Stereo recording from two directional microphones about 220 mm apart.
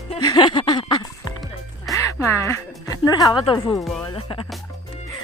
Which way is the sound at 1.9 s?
15° left (ahead or behind).